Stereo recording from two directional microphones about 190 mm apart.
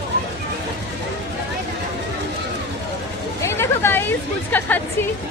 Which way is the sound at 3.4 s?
15° left (ahead or behind).